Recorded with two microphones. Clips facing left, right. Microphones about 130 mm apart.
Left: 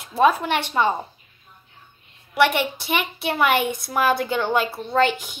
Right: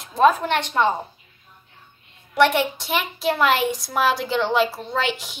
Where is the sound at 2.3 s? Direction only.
Centre (ahead or behind).